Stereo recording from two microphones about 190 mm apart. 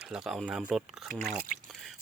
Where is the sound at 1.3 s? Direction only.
45° right (ahead or behind).